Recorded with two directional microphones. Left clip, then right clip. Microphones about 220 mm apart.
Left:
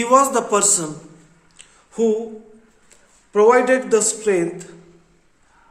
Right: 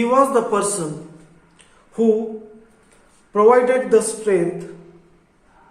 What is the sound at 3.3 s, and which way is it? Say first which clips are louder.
A man's voice: even; 45° left (ahead or behind).